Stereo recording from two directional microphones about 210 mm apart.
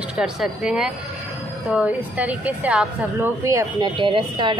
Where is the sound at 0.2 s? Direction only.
5° right (ahead or behind).